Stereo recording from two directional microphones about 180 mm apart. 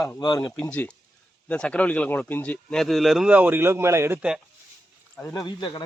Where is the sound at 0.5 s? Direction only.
10° left (ahead or behind); by 4.4 s 10° right (ahead or behind).